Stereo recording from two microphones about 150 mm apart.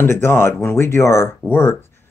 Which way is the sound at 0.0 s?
15° left (ahead or behind).